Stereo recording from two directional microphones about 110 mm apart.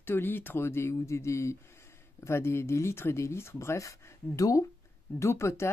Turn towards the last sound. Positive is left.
turn(degrees=25)  # may be behind; listen again after turning